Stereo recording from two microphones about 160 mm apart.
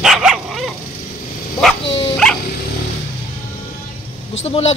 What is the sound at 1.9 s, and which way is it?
Dog, 35° left (ahead or behind).